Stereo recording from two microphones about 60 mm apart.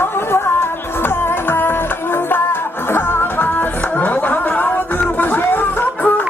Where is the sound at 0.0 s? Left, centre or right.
Left.